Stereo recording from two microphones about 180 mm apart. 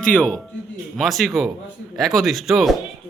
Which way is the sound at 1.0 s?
Centre (ahead or behind).